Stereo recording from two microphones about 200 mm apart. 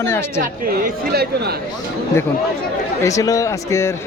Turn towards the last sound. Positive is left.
turn(degrees=15)  # may be behind; listen again after turning